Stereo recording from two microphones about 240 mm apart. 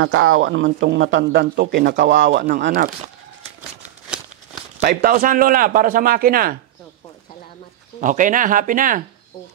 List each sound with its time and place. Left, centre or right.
0.0 s speech: right
4.7 s a man's voice: right
8.0 s a man's voice: right